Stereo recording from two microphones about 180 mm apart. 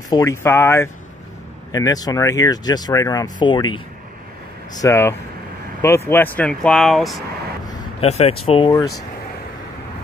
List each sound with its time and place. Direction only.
0.1 s speech: 15° left (ahead or behind); by 7.2 s centre (ahead or behind)
8.0 s speech: 35° left (ahead or behind)